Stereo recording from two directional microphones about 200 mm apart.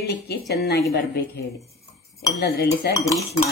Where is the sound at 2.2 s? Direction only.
50° left (ahead or behind).